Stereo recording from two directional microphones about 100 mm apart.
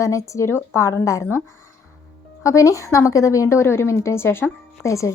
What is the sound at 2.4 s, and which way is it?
Speech, 35° left (ahead or behind).